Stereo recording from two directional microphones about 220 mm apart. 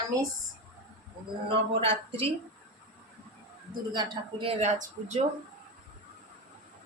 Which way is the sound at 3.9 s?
25° right (ahead or behind).